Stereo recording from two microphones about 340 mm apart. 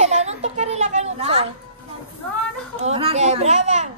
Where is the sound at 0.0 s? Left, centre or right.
Centre.